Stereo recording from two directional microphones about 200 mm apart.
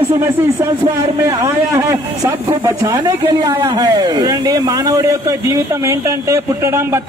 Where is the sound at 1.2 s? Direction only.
15° right (ahead or behind).